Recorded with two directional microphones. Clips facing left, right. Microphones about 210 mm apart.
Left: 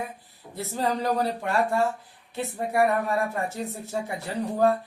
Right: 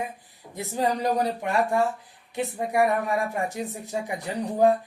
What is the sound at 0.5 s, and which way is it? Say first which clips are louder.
Speech: right 1 dB; 15° right (ahead or behind).